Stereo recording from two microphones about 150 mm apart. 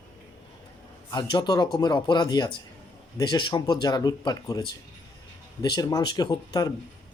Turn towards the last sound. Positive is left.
turn(degrees=25)  # may be behind; listen again after turning